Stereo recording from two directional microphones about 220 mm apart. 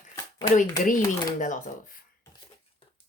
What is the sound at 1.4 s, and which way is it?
Speech, 35° left (ahead or behind).